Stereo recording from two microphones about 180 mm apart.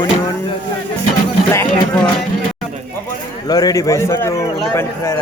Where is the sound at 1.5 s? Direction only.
15° left (ahead or behind).